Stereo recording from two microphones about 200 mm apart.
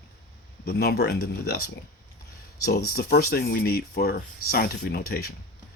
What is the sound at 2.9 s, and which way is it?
Speech, 50° left (ahead or behind).